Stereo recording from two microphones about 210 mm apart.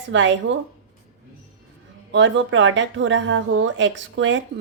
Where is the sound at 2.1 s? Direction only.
60° right (ahead or behind).